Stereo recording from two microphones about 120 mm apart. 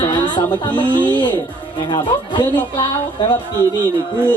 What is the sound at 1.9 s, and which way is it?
Speech, 40° left (ahead or behind).